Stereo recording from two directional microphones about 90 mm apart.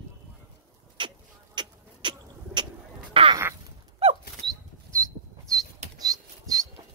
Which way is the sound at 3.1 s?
75° right (ahead or behind).